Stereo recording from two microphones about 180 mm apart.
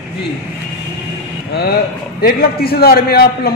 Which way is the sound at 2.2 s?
55° left (ahead or behind).